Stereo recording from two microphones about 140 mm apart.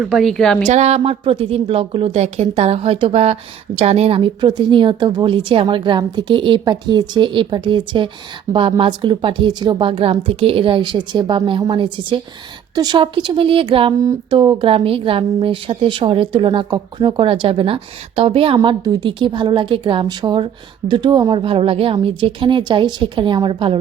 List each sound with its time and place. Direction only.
0.0 s speech: centre (ahead or behind)
0.6 s a woman's voice: 50° right (ahead or behind)
14.0 s a sound: 25° right (ahead or behind)
14.3 s a woman's voice: 35° right (ahead or behind)